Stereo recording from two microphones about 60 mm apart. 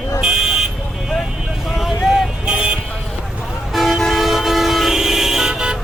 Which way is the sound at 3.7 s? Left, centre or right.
Centre.